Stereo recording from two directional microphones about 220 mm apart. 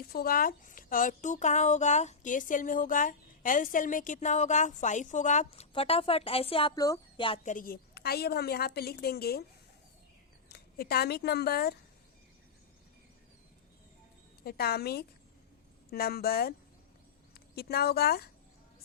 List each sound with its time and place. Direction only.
0.1 s speech: 40° left (ahead or behind); by 7.5 s 25° left (ahead or behind)
7.5 s a woman's voice: 40° left (ahead or behind)
10.5 s speech: 45° left (ahead or behind)
14.4 s a woman's voice: 45° left (ahead or behind)